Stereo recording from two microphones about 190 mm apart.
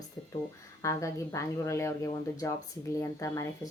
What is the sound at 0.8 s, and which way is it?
Speech, 15° left (ahead or behind).